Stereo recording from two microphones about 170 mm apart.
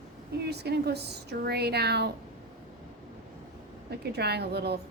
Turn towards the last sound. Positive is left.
turn(degrees=-75)  # may be behind; listen again after turning